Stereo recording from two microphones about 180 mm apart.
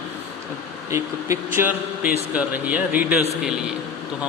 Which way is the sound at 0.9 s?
15° right (ahead or behind).